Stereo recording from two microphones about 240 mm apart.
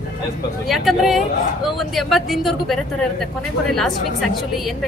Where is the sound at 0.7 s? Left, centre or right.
Centre.